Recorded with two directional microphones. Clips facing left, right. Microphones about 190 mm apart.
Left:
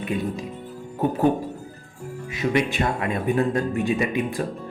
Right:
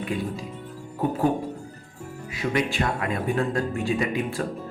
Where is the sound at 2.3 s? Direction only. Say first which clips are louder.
Left 3 dB; 20° left (ahead or behind).